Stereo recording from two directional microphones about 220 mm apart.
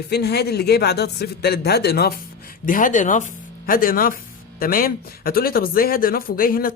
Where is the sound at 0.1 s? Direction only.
45° left (ahead or behind).